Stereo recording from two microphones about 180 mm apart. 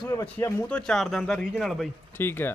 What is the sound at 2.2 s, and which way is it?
Speech, 10° left (ahead or behind).